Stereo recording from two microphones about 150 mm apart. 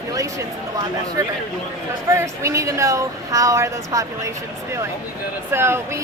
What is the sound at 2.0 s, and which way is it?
Speech, 20° right (ahead or behind).